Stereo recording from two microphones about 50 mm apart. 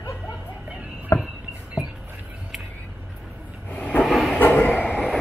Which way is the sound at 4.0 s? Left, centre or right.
Centre.